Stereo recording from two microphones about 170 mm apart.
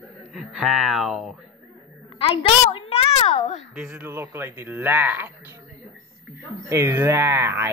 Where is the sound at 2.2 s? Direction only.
30° left (ahead or behind).